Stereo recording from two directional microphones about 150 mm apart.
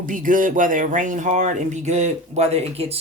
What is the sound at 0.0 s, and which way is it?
Speech, 65° right (ahead or behind).